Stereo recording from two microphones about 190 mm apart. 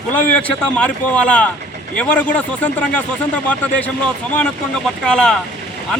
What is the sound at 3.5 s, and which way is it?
Speech, 10° left (ahead or behind).